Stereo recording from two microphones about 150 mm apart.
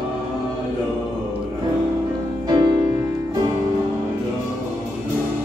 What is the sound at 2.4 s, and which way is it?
Music, 25° right (ahead or behind).